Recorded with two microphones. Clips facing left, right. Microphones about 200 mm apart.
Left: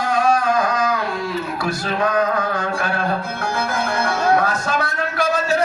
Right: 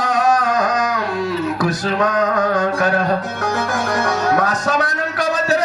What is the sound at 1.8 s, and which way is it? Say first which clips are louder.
Music: left 1 dB; 40° right (ahead or behind).